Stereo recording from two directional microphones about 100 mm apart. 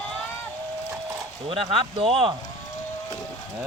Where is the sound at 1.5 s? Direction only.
65° right (ahead or behind).